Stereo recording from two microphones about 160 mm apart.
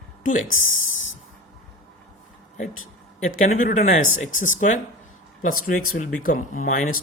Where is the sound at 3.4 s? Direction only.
55° left (ahead or behind).